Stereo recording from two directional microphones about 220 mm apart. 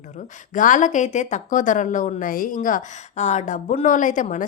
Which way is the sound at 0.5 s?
35° left (ahead or behind).